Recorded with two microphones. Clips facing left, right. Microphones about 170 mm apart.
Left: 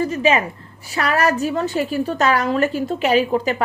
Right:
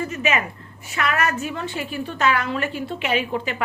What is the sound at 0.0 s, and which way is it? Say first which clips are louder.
A woman's voice: left 6 dB; 35° left (ahead or behind).